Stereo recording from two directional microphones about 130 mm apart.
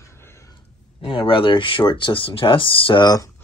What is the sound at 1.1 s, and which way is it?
Speech, 40° left (ahead or behind).